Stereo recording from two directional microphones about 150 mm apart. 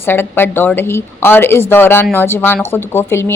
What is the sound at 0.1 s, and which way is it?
A woman's voice, 15° left (ahead or behind).